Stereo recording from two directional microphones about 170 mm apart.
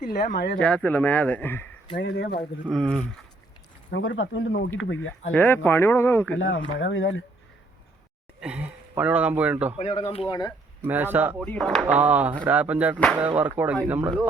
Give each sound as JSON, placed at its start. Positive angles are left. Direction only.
{"t": 0.0, "sound": "speech", "side_deg": 55}
{"t": 0.6, "sound": "speech", "side_deg": 5}
{"t": 2.0, "sound": "speech", "side_deg": 90}
{"t": 2.6, "sound": "speech", "side_deg": 5}
{"t": 3.9, "sound": "speech", "side_deg": 90}
{"t": 5.3, "sound": "speech", "side_deg": 10}
{"t": 6.7, "sound": "speech", "side_deg": 90}
{"t": 8.4, "sound": "speech", "side_deg": -5}
{"t": 9.7, "sound": "speech", "side_deg": 40}
{"t": 10.8, "sound": "speech", "side_deg": -10}
{"t": 11.3, "sound": "speech", "side_deg": 5}
{"t": 11.9, "sound": "speech", "side_deg": -10}